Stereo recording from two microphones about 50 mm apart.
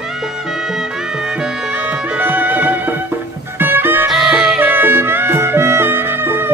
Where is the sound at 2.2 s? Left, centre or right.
Right.